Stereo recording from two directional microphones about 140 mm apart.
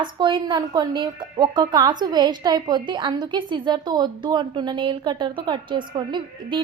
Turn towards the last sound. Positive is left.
turn(degrees=-35)  # may be behind; listen again after turning